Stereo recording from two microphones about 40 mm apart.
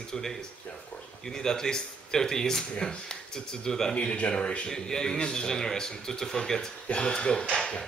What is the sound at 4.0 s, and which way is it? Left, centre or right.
Speech, left.